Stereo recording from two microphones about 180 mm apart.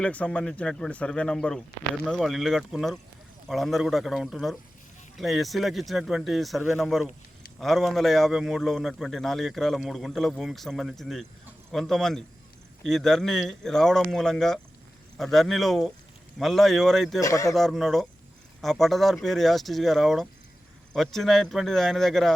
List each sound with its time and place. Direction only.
0.0 s a man's voice: 5° left (ahead or behind)
17.2 s speech: 20° left (ahead or behind)
17.5 s a man's voice: centre (ahead or behind)